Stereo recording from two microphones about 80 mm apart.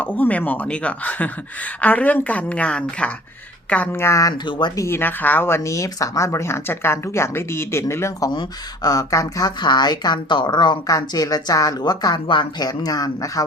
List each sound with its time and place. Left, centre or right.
0.0 s speech: centre
3.9 s speech: left
4.4 s speech: left
4.8 s speech: left
8.3 s speech: left
9.6 s a woman's voice: left
12.6 s speech: left